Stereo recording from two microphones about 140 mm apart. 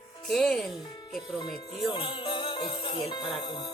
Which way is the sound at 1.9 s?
35° left (ahead or behind).